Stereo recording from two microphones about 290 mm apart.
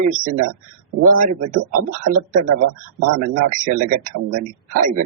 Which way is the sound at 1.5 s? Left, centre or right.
Right.